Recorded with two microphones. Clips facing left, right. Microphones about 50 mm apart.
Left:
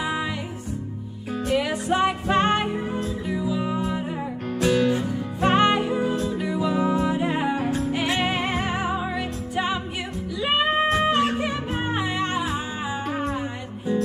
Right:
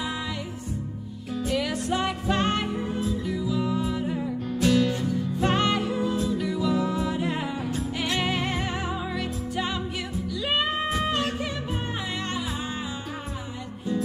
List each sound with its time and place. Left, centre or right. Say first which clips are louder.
1.5 s music: left 4 dB; left
7.5 s music: left 5 dB; left
7.9 s music: left 3 dB; left
11.7 s music: left 5 dB; left